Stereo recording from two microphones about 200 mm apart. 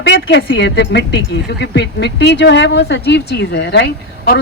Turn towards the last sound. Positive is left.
turn(degrees=60)  # may be behind; listen again after turning